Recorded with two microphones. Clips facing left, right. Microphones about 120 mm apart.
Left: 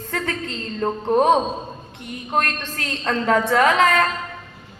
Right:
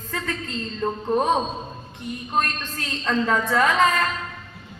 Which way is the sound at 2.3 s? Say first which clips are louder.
Left 3 dB; 70° left (ahead or behind).